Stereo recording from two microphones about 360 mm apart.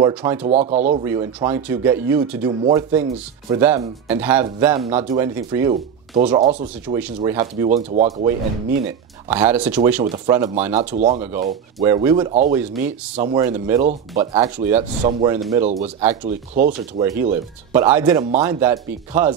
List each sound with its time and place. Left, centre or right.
0.0 s speech: centre
0.5 s speech: centre
7.9 s speech: centre
8.8 s speech: centre
16.5 s speech: right
17.0 s speech: centre